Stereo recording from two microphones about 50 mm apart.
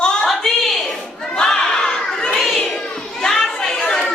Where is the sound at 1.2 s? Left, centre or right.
Centre.